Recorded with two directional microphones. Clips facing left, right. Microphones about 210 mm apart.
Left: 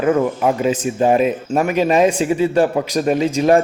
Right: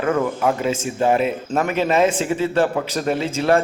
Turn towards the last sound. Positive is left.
turn(degrees=15)  # may be behind; listen again after turning